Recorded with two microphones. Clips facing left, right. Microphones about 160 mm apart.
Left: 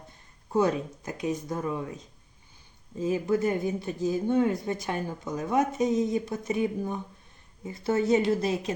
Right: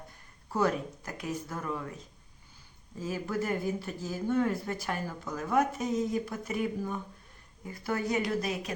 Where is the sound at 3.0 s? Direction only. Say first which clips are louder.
Left 7 dB; 20° left (ahead or behind).